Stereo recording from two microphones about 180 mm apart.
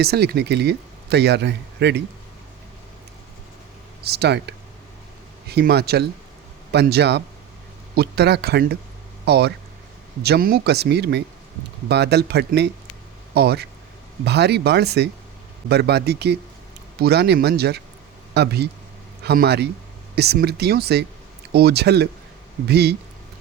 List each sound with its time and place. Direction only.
0.0 s speech: 60° right (ahead or behind)
4.0 s speech: 65° right (ahead or behind)